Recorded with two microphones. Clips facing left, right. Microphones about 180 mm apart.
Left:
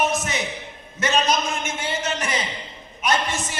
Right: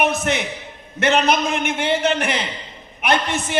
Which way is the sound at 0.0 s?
60° right (ahead or behind).